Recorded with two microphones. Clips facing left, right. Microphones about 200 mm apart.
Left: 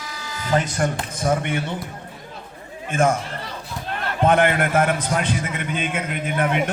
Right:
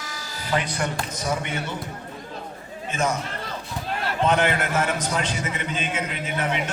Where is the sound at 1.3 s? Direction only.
55° left (ahead or behind).